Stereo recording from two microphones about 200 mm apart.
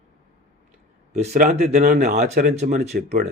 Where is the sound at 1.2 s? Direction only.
40° right (ahead or behind).